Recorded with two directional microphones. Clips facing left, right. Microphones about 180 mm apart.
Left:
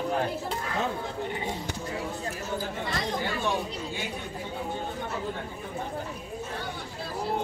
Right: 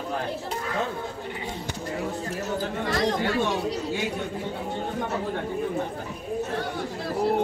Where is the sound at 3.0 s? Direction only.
75° right (ahead or behind).